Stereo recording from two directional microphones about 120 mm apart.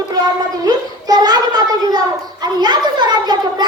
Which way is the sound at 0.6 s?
35° right (ahead or behind).